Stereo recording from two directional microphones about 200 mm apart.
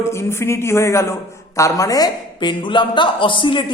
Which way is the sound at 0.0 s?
15° left (ahead or behind).